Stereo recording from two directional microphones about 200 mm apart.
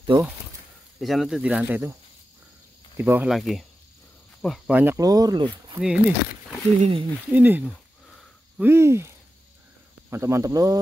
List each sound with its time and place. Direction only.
0.0 s speech: 25° right (ahead or behind)
0.9 s speech: centre (ahead or behind)
3.0 s speech: 10° right (ahead or behind)
5.8 s speech: 5° right (ahead or behind)
6.8 s speech: 25° right (ahead or behind)
7.3 s speech: 10° right (ahead or behind)
8.1 s sniff: centre (ahead or behind)
8.6 s speech: 10° right (ahead or behind)